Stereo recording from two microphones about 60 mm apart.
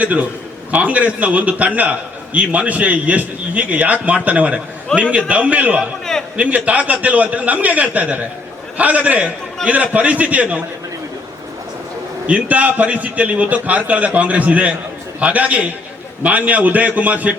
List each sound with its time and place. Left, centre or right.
0.0 s a man's voice: right
12.2 s a man's voice: right